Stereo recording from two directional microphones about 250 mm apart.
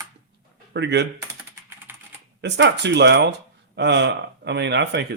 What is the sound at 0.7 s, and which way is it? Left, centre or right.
Speech, right.